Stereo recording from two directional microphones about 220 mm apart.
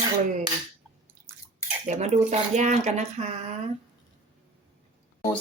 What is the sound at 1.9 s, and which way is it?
Speech, 30° right (ahead or behind).